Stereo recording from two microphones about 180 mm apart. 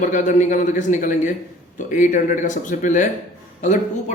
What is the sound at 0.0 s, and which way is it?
A man's voice, 45° left (ahead or behind).